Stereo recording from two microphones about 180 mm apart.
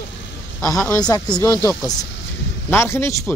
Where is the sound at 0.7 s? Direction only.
5° left (ahead or behind).